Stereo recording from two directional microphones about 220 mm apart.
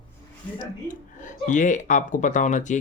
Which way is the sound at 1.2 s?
35° left (ahead or behind).